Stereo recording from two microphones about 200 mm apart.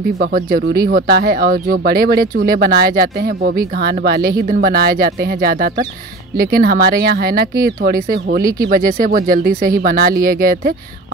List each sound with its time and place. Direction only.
0.2 s speech: 45° right (ahead or behind)